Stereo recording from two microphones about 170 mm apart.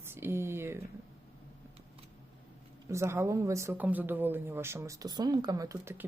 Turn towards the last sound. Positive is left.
turn(degrees=-15)  # may be behind; listen again after turning